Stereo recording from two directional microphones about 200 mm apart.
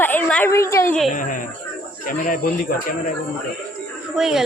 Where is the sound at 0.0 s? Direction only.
10° left (ahead or behind).